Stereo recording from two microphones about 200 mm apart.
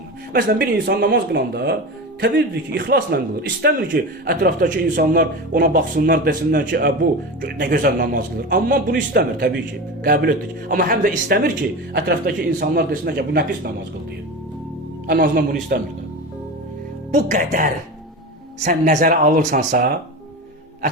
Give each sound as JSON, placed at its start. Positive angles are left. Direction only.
{"t": 0.3, "sound": "a man's voice", "side_deg": -45}
{"t": 15.0, "sound": "a man's voice", "side_deg": -55}
{"t": 17.2, "sound": "speech", "side_deg": -40}